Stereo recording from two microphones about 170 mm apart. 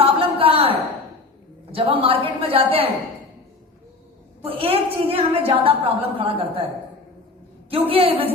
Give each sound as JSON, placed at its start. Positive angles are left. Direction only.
{"t": 0.0, "sound": "a sound", "side_deg": -35}
{"t": 1.7, "sound": "a woman's voice", "side_deg": -35}
{"t": 4.4, "sound": "a woman's voice", "side_deg": -35}
{"t": 7.7, "sound": "a woman's voice", "side_deg": -35}